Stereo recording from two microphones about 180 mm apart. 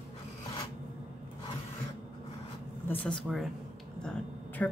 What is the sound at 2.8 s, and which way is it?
Speech, 10° left (ahead or behind).